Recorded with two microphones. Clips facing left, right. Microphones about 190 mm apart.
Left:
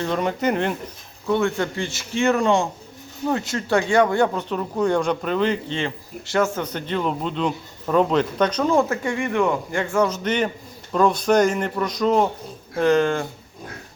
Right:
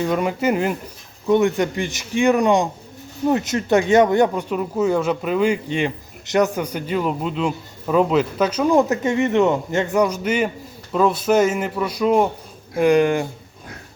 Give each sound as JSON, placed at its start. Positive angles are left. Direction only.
{"t": 0.0, "sound": "speech", "side_deg": -10}
{"t": 1.3, "sound": "speech", "side_deg": -15}